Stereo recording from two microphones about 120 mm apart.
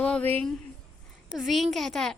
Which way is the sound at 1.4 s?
Centre (ahead or behind).